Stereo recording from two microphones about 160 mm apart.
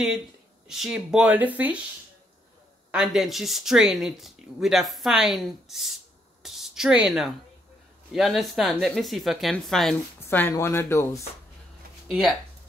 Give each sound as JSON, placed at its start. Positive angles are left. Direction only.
{"t": 0.7, "sound": "speech", "side_deg": -5}
{"t": 2.9, "sound": "speech", "side_deg": -5}
{"t": 6.4, "sound": "a sound", "side_deg": 0}
{"t": 8.1, "sound": "speech", "side_deg": 0}
{"t": 10.2, "sound": "speech", "side_deg": 15}
{"t": 12.1, "sound": "speech", "side_deg": 0}